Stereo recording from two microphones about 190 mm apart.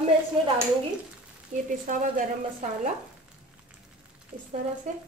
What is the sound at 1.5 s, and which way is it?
A woman's voice, 40° right (ahead or behind).